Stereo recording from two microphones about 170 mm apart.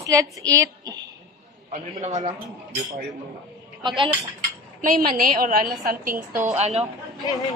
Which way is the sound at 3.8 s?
30° right (ahead or behind).